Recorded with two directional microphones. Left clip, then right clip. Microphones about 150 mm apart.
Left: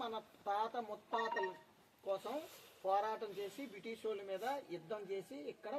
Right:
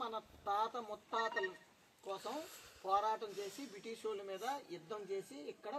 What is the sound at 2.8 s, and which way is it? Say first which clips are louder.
Speech: right 1 dB; 15° left (ahead or behind).